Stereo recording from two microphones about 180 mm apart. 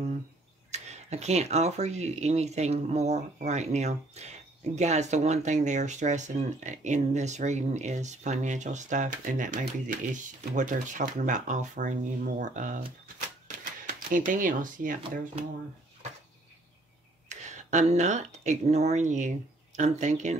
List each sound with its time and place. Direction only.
0.7 s speech: 40° right (ahead or behind)
13.8 s speech: 45° right (ahead or behind)
17.3 s speech: 40° right (ahead or behind)